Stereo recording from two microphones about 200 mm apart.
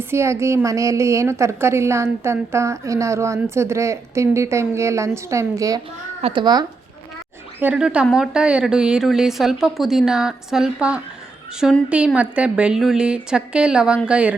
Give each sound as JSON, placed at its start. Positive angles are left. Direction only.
{"t": 0.0, "sound": "a woman's voice", "side_deg": -15}
{"t": 7.6, "sound": "speech", "side_deg": -5}